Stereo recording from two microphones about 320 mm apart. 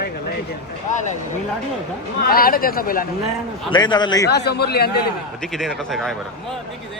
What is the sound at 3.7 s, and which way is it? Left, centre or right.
Speech, centre.